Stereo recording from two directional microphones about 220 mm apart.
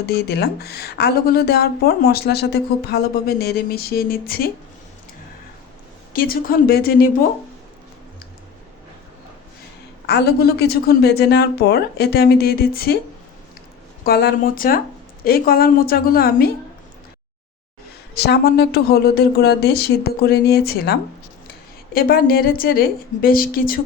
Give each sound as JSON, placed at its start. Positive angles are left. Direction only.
{"t": 0.0, "sound": "a woman's voice", "side_deg": 45}
{"t": 6.1, "sound": "a woman's voice", "side_deg": 40}
{"t": 10.1, "sound": "a woman's voice", "side_deg": 45}
{"t": 14.0, "sound": "a woman's voice", "side_deg": 45}
{"t": 18.1, "sound": "a woman's voice", "side_deg": 45}